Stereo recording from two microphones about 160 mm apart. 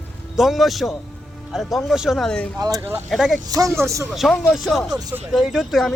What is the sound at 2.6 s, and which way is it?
Speech, 15° right (ahead or behind).